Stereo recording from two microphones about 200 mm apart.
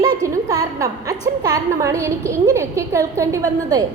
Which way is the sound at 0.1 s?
15° right (ahead or behind).